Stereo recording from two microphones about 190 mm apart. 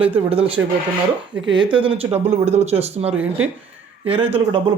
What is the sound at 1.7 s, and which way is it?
Speech, 30° right (ahead or behind).